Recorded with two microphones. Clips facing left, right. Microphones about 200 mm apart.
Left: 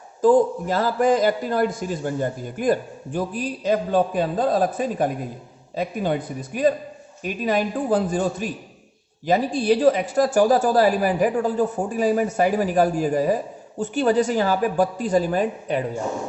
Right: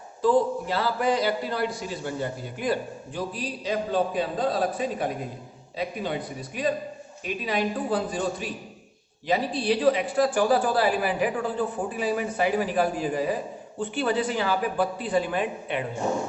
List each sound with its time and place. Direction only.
0.2 s speech: 45° left (ahead or behind)